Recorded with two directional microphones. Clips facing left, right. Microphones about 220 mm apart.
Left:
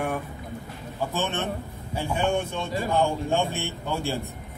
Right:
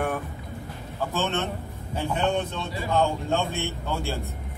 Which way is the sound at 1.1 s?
15° left (ahead or behind).